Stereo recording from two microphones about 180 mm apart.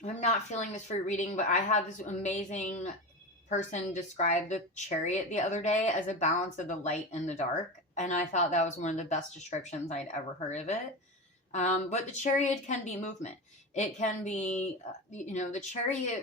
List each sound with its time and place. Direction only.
0.0 s a woman's voice: 40° left (ahead or behind)